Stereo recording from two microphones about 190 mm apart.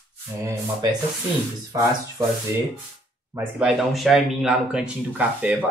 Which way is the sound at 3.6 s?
5° right (ahead or behind).